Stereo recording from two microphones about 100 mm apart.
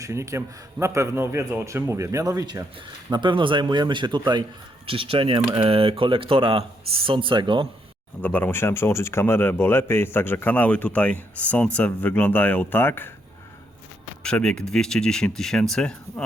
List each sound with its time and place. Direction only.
0.0 s a man's voice: 30° right (ahead or behind)
3.1 s speech: 50° right (ahead or behind)
4.9 s speech: 65° right (ahead or behind)
8.2 s speech: 15° left (ahead or behind)
14.3 s speech: 10° left (ahead or behind)